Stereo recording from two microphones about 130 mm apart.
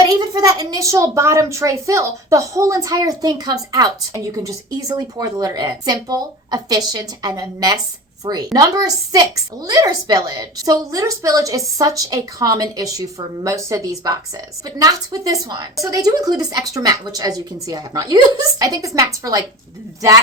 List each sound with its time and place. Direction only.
0.0 s a child's voice: 30° right (ahead or behind)